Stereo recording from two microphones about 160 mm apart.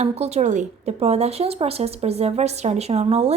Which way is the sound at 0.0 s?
45° right (ahead or behind).